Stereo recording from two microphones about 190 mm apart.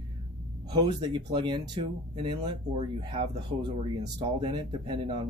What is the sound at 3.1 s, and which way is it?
Speech, 20° right (ahead or behind).